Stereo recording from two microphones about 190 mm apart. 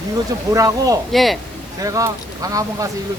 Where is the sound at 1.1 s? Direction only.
Centre (ahead or behind).